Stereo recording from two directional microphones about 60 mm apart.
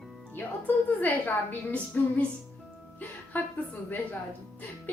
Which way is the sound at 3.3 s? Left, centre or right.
Left.